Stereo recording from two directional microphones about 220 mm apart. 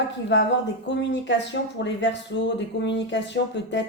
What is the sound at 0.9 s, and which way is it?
Speech, 55° left (ahead or behind).